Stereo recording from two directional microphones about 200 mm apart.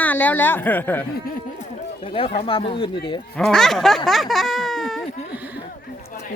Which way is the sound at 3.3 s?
Centre (ahead or behind).